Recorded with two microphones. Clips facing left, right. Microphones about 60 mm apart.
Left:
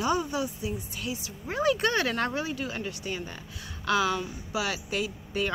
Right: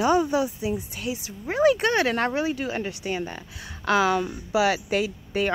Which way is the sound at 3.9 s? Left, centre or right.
Right.